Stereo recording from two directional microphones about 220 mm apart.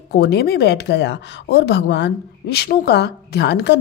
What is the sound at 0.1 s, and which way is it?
Speech, 45° left (ahead or behind).